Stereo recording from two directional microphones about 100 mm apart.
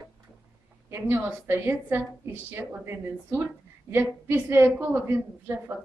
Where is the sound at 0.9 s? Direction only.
25° right (ahead or behind).